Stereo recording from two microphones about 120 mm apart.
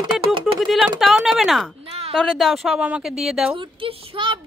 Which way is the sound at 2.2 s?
5° left (ahead or behind).